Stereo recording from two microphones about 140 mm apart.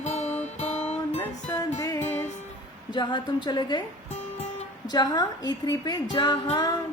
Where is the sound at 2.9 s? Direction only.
35° left (ahead or behind).